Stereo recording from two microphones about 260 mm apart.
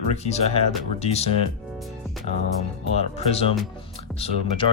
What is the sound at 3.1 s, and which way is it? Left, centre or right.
Speech, left.